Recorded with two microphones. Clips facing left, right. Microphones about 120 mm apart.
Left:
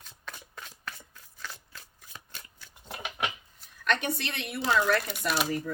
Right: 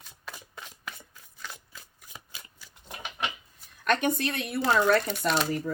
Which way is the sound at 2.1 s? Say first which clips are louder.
Even; 10° right (ahead or behind).